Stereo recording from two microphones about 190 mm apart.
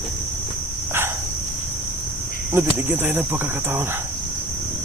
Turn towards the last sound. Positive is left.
turn(degrees=-10)  # may be behind; listen again after turning